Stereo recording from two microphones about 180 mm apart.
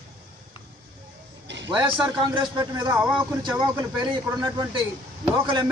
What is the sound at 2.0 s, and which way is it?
Speech, 25° right (ahead or behind).